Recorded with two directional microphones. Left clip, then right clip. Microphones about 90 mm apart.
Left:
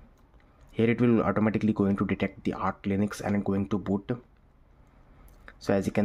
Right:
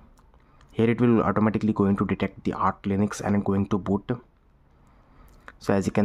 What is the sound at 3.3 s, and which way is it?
Speech, 35° right (ahead or behind).